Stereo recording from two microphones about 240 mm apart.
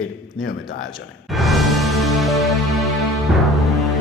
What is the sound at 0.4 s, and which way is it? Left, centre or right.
Speech, left.